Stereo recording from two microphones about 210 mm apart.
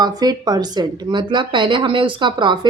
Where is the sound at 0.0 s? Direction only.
20° right (ahead or behind).